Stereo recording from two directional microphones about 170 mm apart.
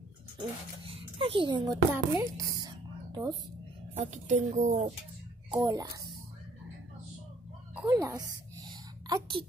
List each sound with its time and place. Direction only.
0.4 s a child's voice: 30° right (ahead or behind)
3.9 s a woman's voice: 45° right (ahead or behind)
5.6 s a child's voice: 25° right (ahead or behind)
7.9 s a sound: 20° right (ahead or behind)